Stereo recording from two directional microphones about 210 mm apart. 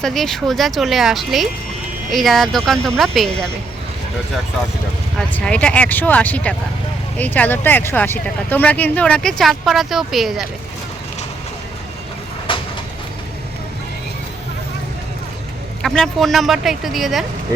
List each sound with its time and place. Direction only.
0.0 s speech: centre (ahead or behind)
5.1 s speech: 5° left (ahead or behind)
12.5 s a sound: 25° left (ahead or behind)
15.8 s speech: centre (ahead or behind)